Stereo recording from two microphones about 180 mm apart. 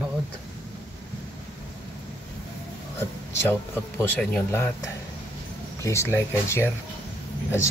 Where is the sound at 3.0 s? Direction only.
15° left (ahead or behind).